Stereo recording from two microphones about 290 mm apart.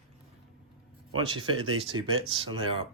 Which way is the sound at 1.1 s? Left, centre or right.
Centre.